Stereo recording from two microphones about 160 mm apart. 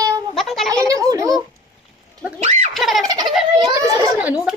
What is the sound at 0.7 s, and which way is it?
Speech, 20° right (ahead or behind).